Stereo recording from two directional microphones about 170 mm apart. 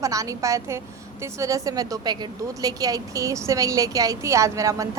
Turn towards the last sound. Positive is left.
turn(degrees=-20)  # may be behind; listen again after turning